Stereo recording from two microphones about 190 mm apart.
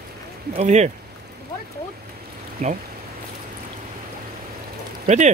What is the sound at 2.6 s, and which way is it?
Speech, 40° right (ahead or behind).